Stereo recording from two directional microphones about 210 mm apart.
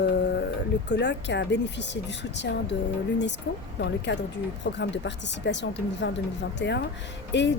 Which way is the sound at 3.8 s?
55° left (ahead or behind).